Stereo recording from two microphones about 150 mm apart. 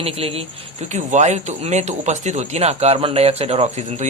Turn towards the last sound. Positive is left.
turn(degrees=-45)  # may be behind; listen again after turning